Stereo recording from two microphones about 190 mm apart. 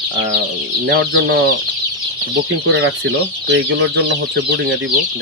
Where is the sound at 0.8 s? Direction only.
65° right (ahead or behind).